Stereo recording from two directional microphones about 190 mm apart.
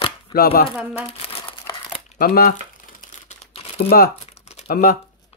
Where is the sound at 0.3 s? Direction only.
50° left (ahead or behind).